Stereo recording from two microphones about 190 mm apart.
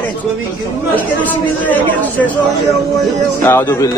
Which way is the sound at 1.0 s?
10° left (ahead or behind).